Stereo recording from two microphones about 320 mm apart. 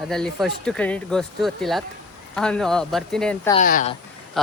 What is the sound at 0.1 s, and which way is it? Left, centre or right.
Speech, centre.